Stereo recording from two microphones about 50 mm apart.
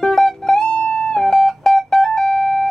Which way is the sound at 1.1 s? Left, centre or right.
Centre.